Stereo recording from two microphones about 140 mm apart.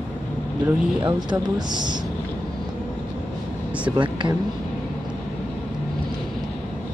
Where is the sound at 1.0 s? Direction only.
30° right (ahead or behind).